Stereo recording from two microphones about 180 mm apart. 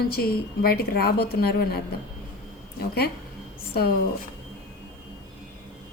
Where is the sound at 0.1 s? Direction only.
60° left (ahead or behind).